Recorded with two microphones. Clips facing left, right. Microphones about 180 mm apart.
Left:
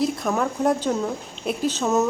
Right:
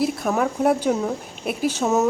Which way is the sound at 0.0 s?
5° right (ahead or behind).